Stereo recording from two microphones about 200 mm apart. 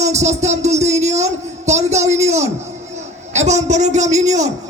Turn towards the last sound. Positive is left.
turn(degrees=-35)  # may be behind; listen again after turning